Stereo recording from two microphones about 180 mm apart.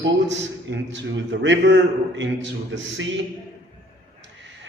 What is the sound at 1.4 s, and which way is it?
Speech, 80° right.